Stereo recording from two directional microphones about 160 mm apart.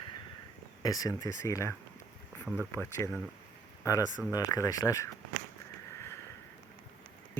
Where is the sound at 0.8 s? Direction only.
20° left (ahead or behind).